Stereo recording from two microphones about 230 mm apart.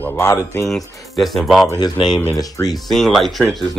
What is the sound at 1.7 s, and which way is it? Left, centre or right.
Speech, centre.